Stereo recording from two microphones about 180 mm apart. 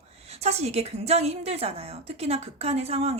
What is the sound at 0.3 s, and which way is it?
A woman's voice, 35° right (ahead or behind).